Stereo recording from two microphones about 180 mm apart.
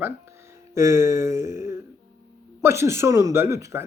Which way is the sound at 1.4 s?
45° left (ahead or behind).